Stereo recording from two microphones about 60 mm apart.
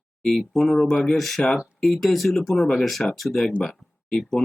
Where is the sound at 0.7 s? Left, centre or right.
Centre.